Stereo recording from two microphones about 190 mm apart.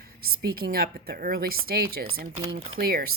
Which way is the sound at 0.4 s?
50° right (ahead or behind).